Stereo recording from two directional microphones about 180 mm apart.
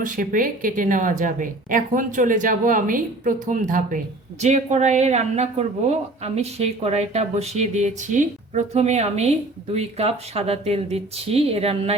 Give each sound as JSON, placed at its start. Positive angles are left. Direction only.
{"t": 0.0, "sound": "speech", "side_deg": -50}